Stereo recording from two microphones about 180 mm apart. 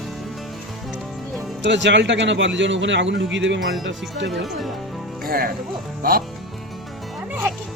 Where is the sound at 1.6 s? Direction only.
85° right.